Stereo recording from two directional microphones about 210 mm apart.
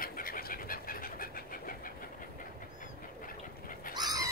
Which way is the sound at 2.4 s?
40° left (ahead or behind).